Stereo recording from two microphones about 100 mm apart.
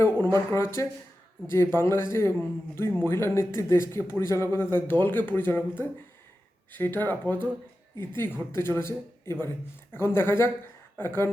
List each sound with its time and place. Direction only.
0.0 s speech: 25° left (ahead or behind)